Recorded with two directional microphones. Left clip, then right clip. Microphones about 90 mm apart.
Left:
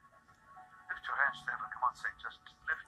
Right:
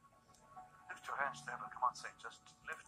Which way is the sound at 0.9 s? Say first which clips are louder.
Left 8 dB; 15° right (ahead or behind).